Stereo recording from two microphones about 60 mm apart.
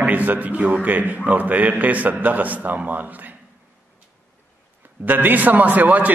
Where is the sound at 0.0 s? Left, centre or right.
Right.